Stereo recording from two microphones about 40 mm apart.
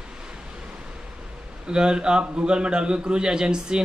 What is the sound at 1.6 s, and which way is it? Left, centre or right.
A man's voice, right.